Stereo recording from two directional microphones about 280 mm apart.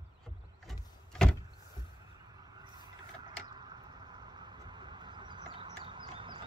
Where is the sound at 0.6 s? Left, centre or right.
Centre.